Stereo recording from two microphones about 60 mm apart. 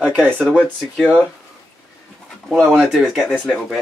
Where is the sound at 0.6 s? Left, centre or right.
Centre.